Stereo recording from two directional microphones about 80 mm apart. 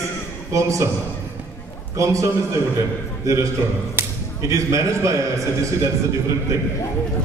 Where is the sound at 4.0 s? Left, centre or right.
Right.